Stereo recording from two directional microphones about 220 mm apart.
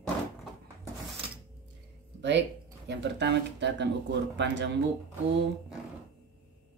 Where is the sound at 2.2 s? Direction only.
50° right (ahead or behind).